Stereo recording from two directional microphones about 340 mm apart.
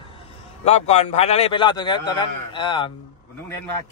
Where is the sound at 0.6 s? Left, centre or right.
Centre.